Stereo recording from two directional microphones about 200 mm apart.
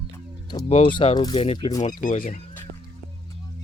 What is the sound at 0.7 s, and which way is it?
Speech, 25° left (ahead or behind).